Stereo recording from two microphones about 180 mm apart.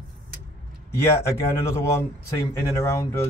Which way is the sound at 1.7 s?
15° left (ahead or behind).